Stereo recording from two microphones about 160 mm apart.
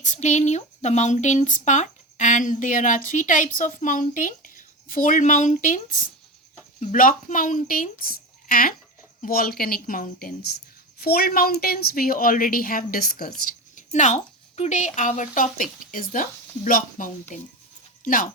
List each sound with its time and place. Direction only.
0.0 s a woman's voice: 50° left (ahead or behind)
11.0 s a woman's voice: 75° left (ahead or behind)
13.4 s a woman's voice: 50° left (ahead or behind)
17.3 s speech: 50° left (ahead or behind)